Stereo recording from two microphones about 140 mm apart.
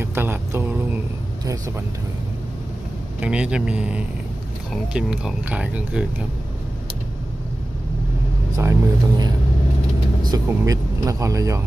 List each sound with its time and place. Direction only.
0.0 s music: 15° right (ahead or behind)
3.2 s speech: 10° right (ahead or behind)
8.5 s speech: 20° right (ahead or behind)
10.3 s speech: 25° right (ahead or behind)